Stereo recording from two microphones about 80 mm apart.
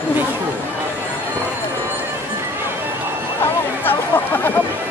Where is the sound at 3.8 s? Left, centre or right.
Left.